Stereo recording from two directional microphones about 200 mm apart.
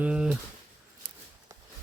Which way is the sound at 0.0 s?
5° right (ahead or behind).